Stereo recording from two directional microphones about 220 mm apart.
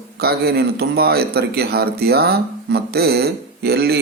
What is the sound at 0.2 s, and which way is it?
Speech, 45° right (ahead or behind).